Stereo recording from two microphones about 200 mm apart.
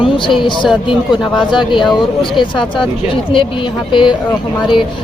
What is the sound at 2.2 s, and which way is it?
Speech, 25° left (ahead or behind).